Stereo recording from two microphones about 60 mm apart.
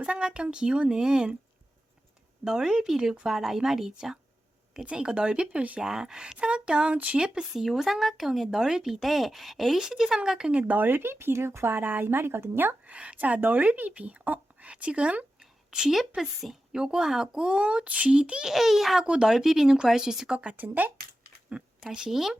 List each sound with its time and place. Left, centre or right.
0.0 s speech: centre
2.4 s speech: centre
7.6 s speech: centre; by 12.7 s right
12.8 s speech: right
15.4 s speech: centre
18.5 s speech: centre
20.6 s speech: right
21.8 s speech: centre